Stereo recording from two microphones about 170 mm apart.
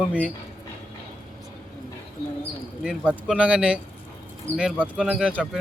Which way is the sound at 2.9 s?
5° right (ahead or behind).